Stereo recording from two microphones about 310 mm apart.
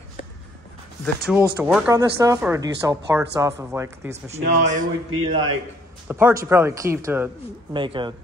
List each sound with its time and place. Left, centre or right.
1.0 s speech: centre
4.1 s a man's voice: right
6.0 s speech: centre